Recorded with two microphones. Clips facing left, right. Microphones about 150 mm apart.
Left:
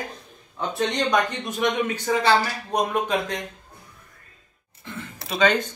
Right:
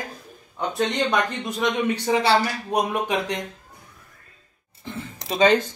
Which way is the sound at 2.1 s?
10° right (ahead or behind).